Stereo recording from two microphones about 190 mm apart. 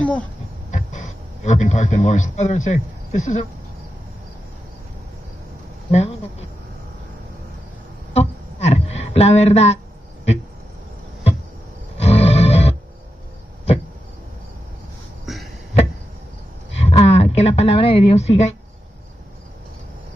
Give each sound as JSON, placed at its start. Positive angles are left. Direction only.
{"t": 0.0, "sound": "speech", "side_deg": 5}
{"t": 0.7, "sound": "a man's voice", "side_deg": 40}
{"t": 5.9, "sound": "speech", "side_deg": 35}
{"t": 8.1, "sound": "a sound", "side_deg": 35}
{"t": 11.9, "sound": "music", "side_deg": 30}
{"t": 15.3, "sound": "music", "side_deg": 0}
{"t": 16.7, "sound": "a sound", "side_deg": 35}